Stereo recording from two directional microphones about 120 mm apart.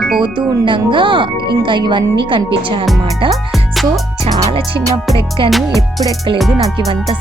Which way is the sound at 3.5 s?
Centre (ahead or behind).